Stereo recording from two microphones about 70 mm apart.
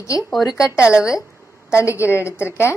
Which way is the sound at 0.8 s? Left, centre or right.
Centre.